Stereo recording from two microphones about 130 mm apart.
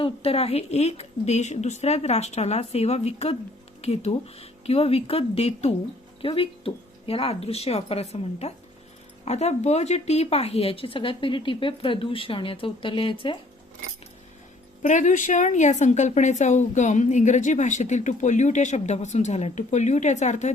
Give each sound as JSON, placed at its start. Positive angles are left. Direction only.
{"t": 0.0, "sound": "speech", "side_deg": 50}
{"t": 14.8, "sound": "a woman's voice", "side_deg": 70}